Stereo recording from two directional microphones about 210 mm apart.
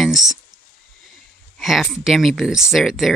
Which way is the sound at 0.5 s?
20° right (ahead or behind).